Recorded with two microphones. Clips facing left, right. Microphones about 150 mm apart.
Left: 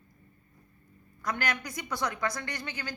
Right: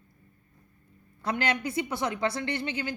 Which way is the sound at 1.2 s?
30° right (ahead or behind).